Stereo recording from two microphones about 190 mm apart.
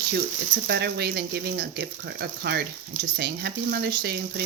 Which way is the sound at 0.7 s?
60° right (ahead or behind).